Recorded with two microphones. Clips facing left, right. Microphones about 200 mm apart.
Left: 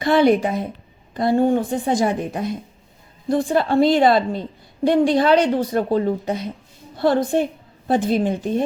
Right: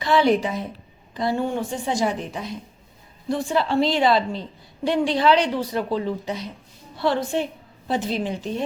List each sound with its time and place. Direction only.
0.0 s a woman's voice: 55° left (ahead or behind)